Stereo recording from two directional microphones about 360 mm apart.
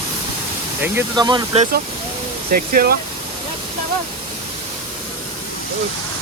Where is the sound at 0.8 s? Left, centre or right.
Centre.